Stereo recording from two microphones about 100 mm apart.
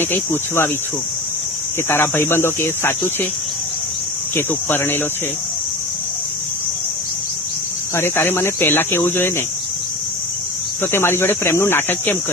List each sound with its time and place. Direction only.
0.0 s speech: 20° left (ahead or behind)
1.9 s speech: 25° left (ahead or behind)
4.4 s speech: 25° left (ahead or behind)
7.9 s speech: 25° left (ahead or behind)
10.9 s speech: 25° left (ahead or behind)